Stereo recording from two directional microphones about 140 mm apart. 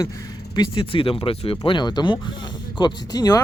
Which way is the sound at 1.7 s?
30° left (ahead or behind).